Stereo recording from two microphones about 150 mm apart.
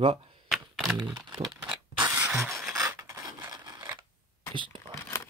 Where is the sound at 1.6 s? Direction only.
10° right (ahead or behind).